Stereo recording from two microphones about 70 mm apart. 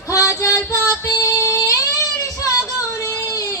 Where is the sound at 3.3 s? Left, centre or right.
Left.